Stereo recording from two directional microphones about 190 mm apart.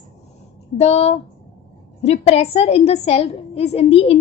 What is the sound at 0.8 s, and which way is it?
A woman's voice, 35° left (ahead or behind).